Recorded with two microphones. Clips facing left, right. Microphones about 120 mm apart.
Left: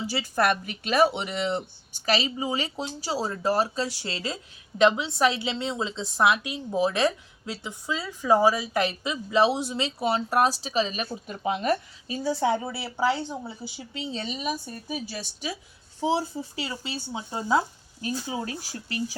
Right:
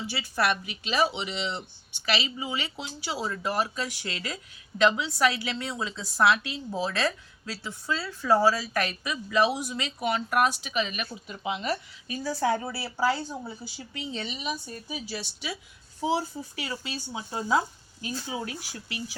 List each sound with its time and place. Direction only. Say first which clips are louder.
0.1 s a woman's voice: left 3 dB; 45° left (ahead or behind)
12.0 s a woman's voice: left 2 dB; 25° left (ahead or behind); by 15.5 s 40° left (ahead or behind)
16.0 s a woman's voice: left 2 dB; 25° left (ahead or behind)